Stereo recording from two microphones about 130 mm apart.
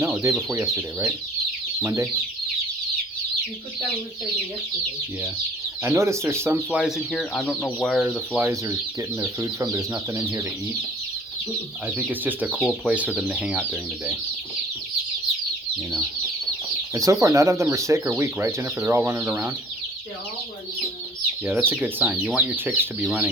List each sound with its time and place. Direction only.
0.0 s chicken: 20° right (ahead or behind)
0.5 s speech: 20° right (ahead or behind)
5.8 s speech: 20° right (ahead or behind); by 8.4 s centre (ahead or behind)
8.4 s speech: 20° right (ahead or behind)
11.9 s speech: 10° right (ahead or behind)
12.5 s speech: 10° left (ahead or behind)
13.1 s speech: 5° right (ahead or behind)
16.9 s speech: 25° right (ahead or behind)
21.4 s speech: 15° right (ahead or behind)